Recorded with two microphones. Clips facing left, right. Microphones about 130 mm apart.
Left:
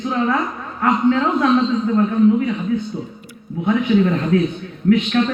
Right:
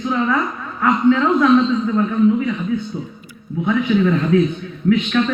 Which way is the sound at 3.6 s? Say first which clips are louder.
Left 1 dB; 35° left (ahead or behind).